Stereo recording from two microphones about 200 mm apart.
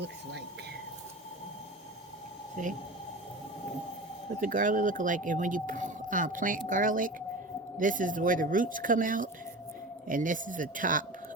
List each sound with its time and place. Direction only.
2.6 s speech: 40° right (ahead or behind)
4.4 s speech: 40° right (ahead or behind)